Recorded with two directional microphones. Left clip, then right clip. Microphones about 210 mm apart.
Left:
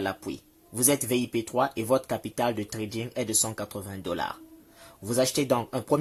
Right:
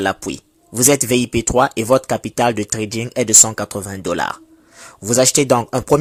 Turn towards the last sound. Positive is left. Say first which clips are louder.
# right 11 dB
turn(degrees=-30)  # may be behind; listen again after turning